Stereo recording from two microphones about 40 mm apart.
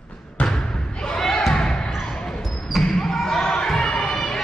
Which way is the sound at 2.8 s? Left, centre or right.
Centre.